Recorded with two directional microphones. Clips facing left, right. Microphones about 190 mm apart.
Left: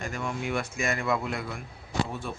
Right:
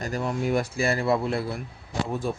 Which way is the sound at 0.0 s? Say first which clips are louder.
Right 5 dB; 35° right (ahead or behind).